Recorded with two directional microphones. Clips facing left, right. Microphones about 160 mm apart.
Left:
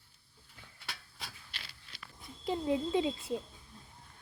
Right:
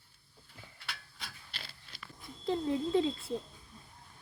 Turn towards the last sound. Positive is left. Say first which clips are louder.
# right 2 dB
turn(degrees=15)  # may be behind; listen again after turning